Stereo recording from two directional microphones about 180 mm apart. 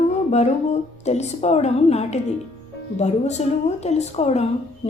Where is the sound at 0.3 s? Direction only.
35° left (ahead or behind).